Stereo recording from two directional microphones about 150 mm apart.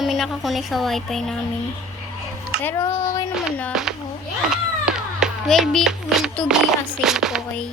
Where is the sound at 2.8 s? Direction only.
25° left (ahead or behind).